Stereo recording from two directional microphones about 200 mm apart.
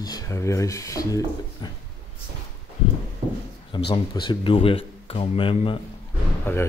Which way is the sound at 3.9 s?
20° left (ahead or behind).